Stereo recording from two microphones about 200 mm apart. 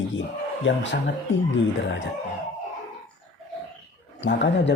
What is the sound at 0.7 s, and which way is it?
Speech, 65° left (ahead or behind).